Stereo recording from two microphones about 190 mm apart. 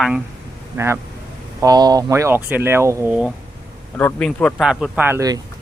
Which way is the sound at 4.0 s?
10° left (ahead or behind).